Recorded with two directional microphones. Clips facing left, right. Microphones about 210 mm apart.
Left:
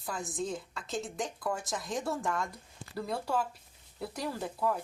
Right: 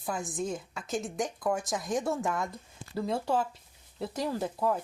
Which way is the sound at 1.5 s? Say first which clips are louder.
Right 6 dB; 20° right (ahead or behind).